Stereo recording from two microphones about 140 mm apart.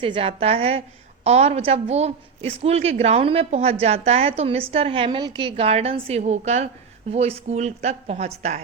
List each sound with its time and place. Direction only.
0.0 s a woman's voice: 40° right (ahead or behind)